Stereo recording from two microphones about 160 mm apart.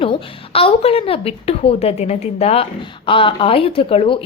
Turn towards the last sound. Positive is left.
turn(degrees=35)  # may be behind; listen again after turning